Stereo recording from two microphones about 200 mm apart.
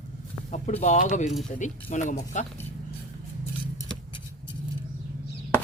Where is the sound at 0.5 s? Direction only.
35° left (ahead or behind).